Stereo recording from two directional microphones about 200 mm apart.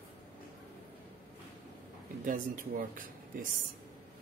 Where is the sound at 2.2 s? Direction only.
45° right (ahead or behind).